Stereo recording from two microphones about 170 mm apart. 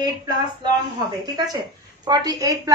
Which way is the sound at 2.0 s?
20° right (ahead or behind).